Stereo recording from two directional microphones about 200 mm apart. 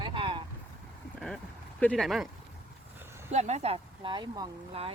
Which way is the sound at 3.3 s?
35° right (ahead or behind).